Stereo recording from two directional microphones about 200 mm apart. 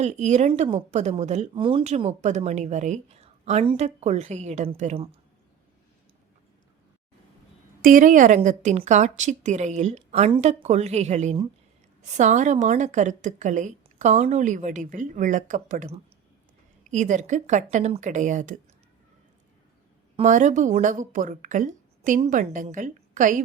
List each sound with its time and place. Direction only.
0.0 s a woman's voice: 35° right (ahead or behind)
7.8 s a woman's voice: 45° right (ahead or behind)
20.1 s a woman's voice: 40° right (ahead or behind)